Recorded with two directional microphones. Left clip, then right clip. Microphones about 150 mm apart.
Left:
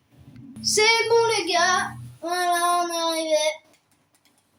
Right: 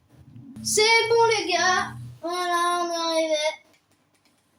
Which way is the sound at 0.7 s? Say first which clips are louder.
Even; 30° left (ahead or behind).